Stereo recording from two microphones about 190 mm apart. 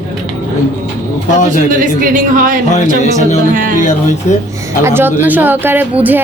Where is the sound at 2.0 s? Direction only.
45° right (ahead or behind).